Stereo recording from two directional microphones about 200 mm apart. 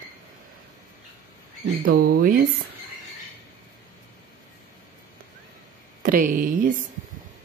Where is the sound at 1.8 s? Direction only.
50° right (ahead or behind).